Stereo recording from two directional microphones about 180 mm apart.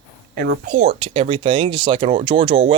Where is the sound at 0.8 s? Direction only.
30° right (ahead or behind).